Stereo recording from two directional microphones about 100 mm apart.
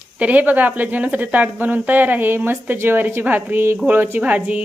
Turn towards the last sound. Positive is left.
turn(degrees=-15)  # may be behind; listen again after turning